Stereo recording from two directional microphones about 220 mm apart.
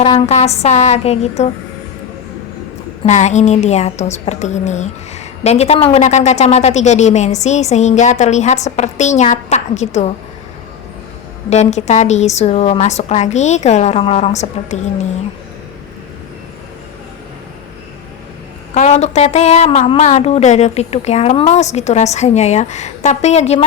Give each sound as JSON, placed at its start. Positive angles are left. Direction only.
{"t": 0.0, "sound": "speech", "side_deg": 30}
{"t": 3.0, "sound": "a woman's voice", "side_deg": 30}
{"t": 11.4, "sound": "a woman's voice", "side_deg": 30}
{"t": 18.7, "sound": "a woman's voice", "side_deg": 30}